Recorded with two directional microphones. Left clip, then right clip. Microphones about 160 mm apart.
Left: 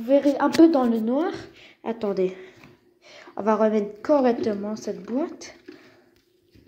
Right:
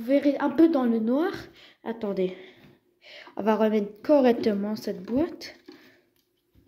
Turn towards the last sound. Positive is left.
turn(degrees=-30)  # may be behind; listen again after turning